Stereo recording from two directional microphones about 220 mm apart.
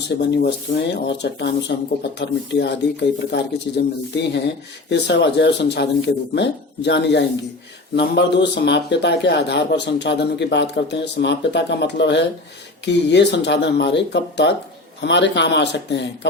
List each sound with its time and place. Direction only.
0.1 s a man's voice: 55° left (ahead or behind)